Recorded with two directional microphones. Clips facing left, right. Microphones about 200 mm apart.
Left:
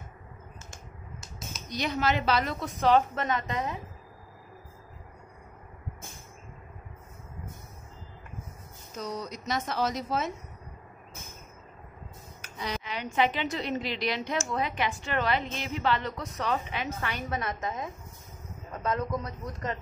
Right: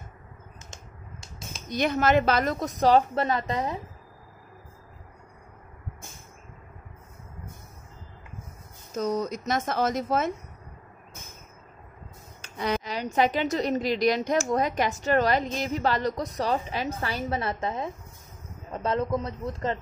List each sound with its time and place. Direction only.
1.7 s a woman's voice: 50° right (ahead or behind); by 3.8 s 35° right (ahead or behind)
8.9 s speech: 45° right (ahead or behind)
12.5 s a sound: 55° right (ahead or behind)
12.8 s a woman's voice: 40° right (ahead or behind)